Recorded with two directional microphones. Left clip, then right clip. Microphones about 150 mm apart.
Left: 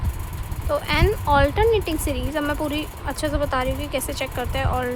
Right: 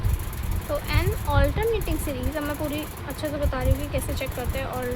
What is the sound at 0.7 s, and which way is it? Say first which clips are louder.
Speech: left 7 dB; 50° left (ahead or behind).